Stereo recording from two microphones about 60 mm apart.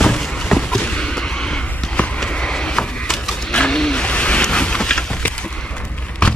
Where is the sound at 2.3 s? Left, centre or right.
Centre.